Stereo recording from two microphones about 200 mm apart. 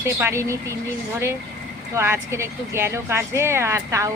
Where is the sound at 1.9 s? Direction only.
15° right (ahead or behind).